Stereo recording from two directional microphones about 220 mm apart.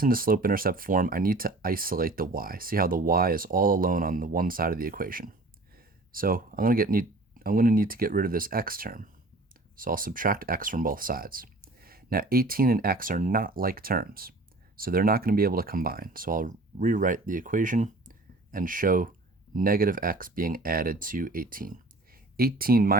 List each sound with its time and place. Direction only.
0.0 s speech: 40° right (ahead or behind)